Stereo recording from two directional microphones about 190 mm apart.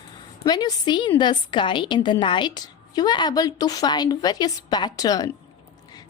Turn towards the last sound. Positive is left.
turn(degrees=20)  # may be behind; listen again after turning